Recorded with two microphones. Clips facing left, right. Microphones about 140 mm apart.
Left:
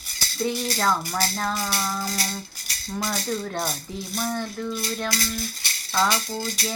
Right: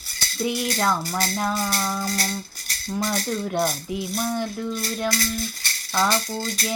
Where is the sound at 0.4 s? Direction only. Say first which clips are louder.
Right 1 dB; 10° right (ahead or behind).